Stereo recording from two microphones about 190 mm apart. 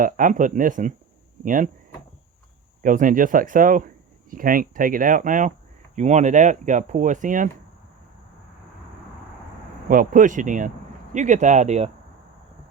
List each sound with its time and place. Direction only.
0.0 s speech: 45° right (ahead or behind)
2.8 s speech: 45° right (ahead or behind)
9.9 s speech: 45° right (ahead or behind)